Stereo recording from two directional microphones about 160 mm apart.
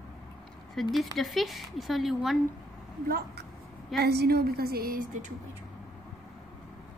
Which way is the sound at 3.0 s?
75° right (ahead or behind).